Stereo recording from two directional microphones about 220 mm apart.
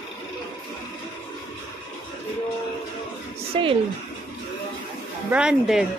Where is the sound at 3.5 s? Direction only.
25° right (ahead or behind).